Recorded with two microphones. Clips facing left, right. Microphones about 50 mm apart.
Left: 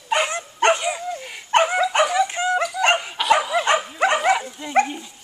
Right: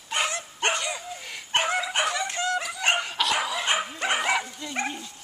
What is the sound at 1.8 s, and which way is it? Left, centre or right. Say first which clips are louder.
Dog: left 9 dB; left.